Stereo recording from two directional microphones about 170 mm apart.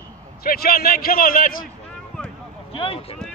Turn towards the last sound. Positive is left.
turn(degrees=35)  # may be behind; listen again after turning